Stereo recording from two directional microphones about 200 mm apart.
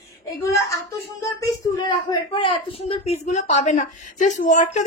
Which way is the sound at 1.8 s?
20° left (ahead or behind).